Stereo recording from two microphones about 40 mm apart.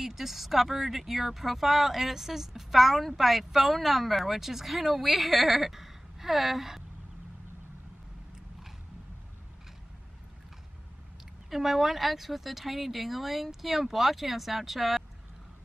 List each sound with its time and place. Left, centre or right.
0.0 s speech: centre
11.5 s speech: centre